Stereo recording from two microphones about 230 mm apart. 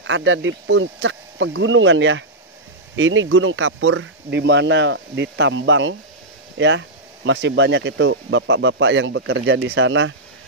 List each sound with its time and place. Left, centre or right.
0.0 s speech: right